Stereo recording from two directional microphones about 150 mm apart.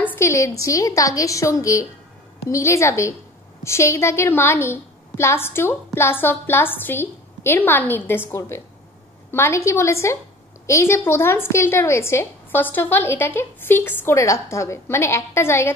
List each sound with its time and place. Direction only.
0.0 s a woman's voice: 15° left (ahead or behind)